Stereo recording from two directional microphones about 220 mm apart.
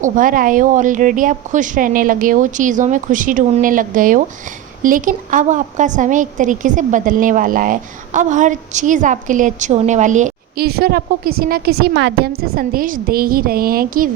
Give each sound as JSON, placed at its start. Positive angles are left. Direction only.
{"t": 0.0, "sound": "a woman's voice", "side_deg": -40}